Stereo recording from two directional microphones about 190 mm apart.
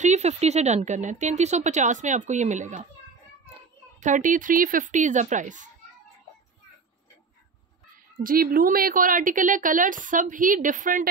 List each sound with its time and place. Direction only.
0.0 s speech: 35° right (ahead or behind)
4.0 s speech: 40° right (ahead or behind)
8.2 s a woman's voice: 50° right (ahead or behind)